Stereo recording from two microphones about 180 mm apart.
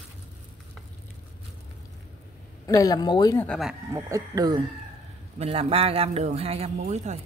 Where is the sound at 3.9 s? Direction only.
20° right (ahead or behind).